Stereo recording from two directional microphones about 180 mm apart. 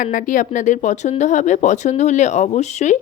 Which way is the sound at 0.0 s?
45° left (ahead or behind).